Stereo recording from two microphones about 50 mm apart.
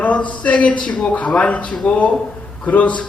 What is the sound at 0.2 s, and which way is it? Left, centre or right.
Speech, left.